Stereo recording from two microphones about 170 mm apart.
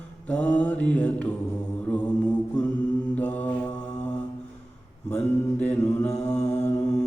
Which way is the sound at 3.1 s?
10° left (ahead or behind).